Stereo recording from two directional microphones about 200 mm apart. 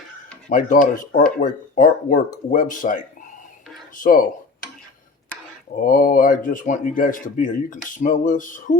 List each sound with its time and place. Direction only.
0.5 s a man's voice: 40° left (ahead or behind)
5.8 s a man's voice: 40° left (ahead or behind)